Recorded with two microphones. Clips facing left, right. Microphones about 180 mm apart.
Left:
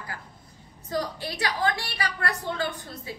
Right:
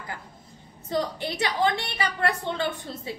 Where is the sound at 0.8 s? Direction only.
25° right (ahead or behind).